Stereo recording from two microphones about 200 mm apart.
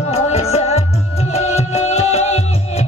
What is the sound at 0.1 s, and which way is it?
Music, 30° left (ahead or behind).